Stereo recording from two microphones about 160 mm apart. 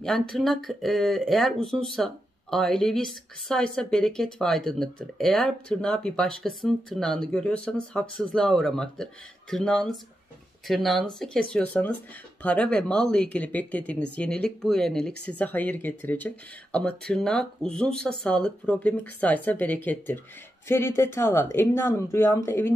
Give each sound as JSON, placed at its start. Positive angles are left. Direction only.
{"t": 0.0, "sound": "speech", "side_deg": 0}